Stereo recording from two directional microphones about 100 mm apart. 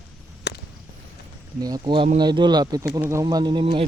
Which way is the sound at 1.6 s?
45° right (ahead or behind).